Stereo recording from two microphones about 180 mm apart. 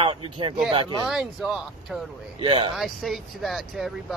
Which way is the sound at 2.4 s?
30° right (ahead or behind).